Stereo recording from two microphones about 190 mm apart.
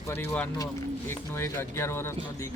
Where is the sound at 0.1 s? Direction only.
10° left (ahead or behind).